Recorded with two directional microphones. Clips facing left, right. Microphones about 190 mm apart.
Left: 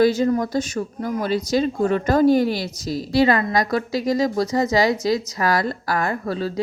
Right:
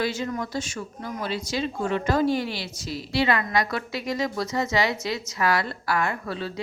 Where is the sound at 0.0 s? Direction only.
35° left (ahead or behind).